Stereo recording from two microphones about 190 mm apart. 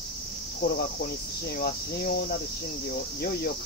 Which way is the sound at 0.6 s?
55° left (ahead or behind).